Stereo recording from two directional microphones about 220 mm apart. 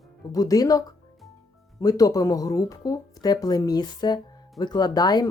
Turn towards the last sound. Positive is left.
turn(degrees=20)  # may be behind; listen again after turning